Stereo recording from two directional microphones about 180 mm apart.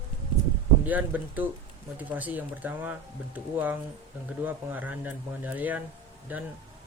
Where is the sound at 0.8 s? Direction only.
10° right (ahead or behind).